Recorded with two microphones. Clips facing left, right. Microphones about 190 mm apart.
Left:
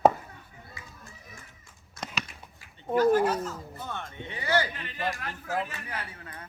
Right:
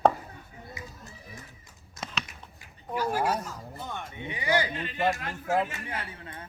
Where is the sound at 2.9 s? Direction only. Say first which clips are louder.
Left 6 dB; 10° right (ahead or behind).